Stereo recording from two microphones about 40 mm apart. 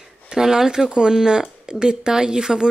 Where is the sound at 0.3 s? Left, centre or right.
Centre.